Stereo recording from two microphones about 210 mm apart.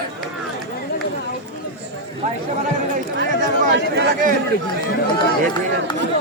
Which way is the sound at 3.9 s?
55° right (ahead or behind).